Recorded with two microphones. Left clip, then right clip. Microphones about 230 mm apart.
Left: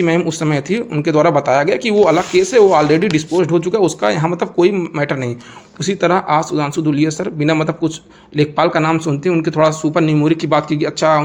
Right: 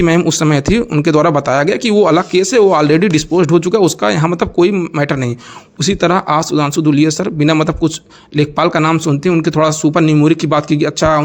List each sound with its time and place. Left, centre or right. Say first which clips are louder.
0.0 s a man's voice: right 3 dB; right